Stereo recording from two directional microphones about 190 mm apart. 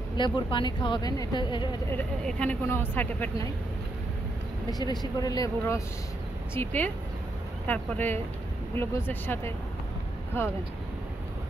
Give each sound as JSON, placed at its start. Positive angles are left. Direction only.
{"t": 0.2, "sound": "a woman's voice", "side_deg": 25}
{"t": 1.9, "sound": "speech", "side_deg": 5}
{"t": 5.2, "sound": "a woman's voice", "side_deg": 20}